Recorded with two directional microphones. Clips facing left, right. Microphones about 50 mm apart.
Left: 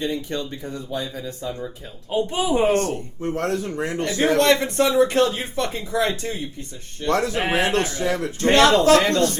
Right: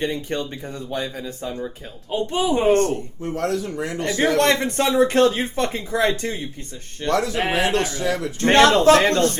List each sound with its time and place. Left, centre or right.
0.0 s speech: right
2.0 s speech: centre
2.6 s speech: right
2.9 s speech: left
4.0 s speech: right
7.1 s speech: left
8.4 s speech: right